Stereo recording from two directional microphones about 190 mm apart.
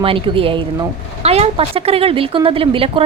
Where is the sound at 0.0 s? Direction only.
30° right (ahead or behind).